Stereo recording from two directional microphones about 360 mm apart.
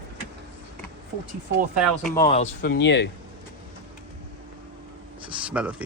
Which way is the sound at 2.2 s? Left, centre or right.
Centre.